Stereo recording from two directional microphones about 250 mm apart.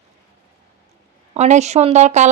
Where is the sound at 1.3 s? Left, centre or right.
Right.